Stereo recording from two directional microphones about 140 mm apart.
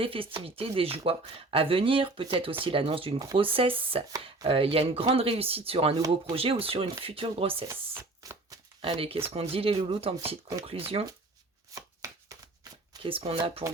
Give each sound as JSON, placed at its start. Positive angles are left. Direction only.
{"t": 0.0, "sound": "speech", "side_deg": -40}
{"t": 8.2, "sound": "a sound", "side_deg": -25}
{"t": 8.8, "sound": "speech", "side_deg": -45}
{"t": 11.7, "sound": "chopping", "side_deg": -25}
{"t": 13.0, "sound": "speech", "side_deg": -40}